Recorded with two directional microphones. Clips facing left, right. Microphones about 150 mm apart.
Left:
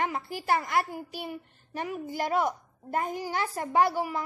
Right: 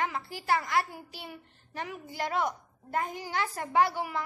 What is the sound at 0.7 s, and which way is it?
A child's voice, 50° left (ahead or behind).